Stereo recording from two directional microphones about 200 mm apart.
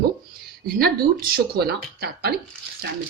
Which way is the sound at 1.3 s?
50° right (ahead or behind).